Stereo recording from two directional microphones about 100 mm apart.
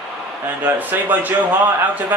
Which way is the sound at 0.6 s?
20° right (ahead or behind).